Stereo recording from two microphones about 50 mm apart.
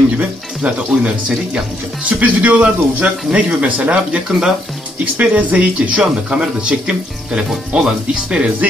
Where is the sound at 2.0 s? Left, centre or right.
Right.